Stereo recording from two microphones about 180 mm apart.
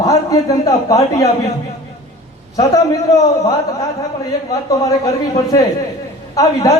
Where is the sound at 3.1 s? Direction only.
20° left (ahead or behind).